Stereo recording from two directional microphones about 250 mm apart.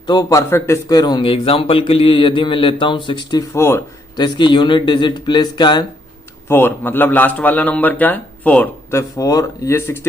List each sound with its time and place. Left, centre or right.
0.1 s a man's voice: centre